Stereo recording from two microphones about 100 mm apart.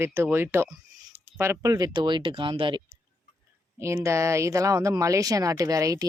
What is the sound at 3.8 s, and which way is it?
Speech, 30° right (ahead or behind).